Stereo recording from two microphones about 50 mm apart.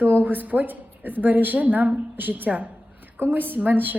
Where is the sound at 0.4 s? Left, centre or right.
Right.